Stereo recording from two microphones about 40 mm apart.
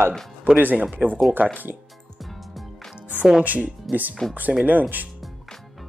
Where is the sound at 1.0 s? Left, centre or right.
Right.